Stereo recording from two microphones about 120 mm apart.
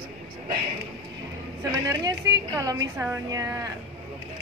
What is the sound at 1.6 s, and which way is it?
A woman's voice, 30° right (ahead or behind).